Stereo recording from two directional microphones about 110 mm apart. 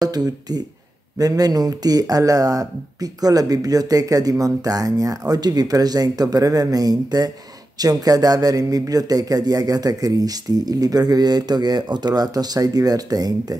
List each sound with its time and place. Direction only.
0.0 s speech: 35° right (ahead or behind)